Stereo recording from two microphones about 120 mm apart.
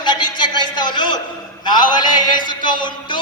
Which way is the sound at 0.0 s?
40° left (ahead or behind).